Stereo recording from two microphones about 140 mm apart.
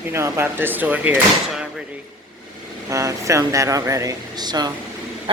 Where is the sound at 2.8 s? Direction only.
20° right (ahead or behind).